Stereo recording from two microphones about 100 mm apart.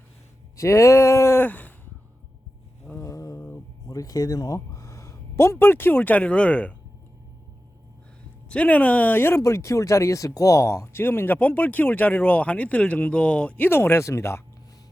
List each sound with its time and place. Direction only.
0.5 s a sound: 30° left (ahead or behind)
2.9 s mantra: 30° left (ahead or behind)
3.8 s speech: 35° left (ahead or behind); by 6.7 s 10° left (ahead or behind)
8.4 s speech: 15° left (ahead or behind)